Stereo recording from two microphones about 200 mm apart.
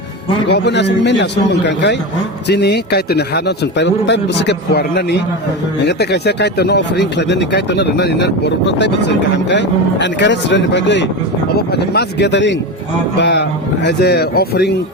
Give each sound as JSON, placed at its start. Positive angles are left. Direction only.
{"t": 0.4, "sound": "speech", "side_deg": 60}